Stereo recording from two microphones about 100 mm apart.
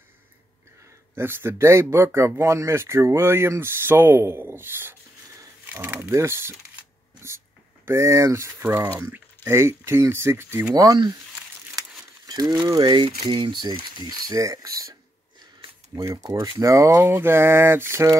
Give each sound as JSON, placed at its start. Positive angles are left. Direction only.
{"t": 1.1, "sound": "speech", "side_deg": -25}
{"t": 7.8, "sound": "speech", "side_deg": -30}
{"t": 10.7, "sound": "speech", "side_deg": -35}
{"t": 12.3, "sound": "speech", "side_deg": -40}
{"t": 13.0, "sound": "speech", "side_deg": -55}
{"t": 15.9, "sound": "speech", "side_deg": -30}